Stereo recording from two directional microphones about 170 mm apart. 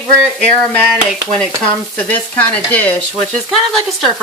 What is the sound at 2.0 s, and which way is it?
Speech, 10° left (ahead or behind).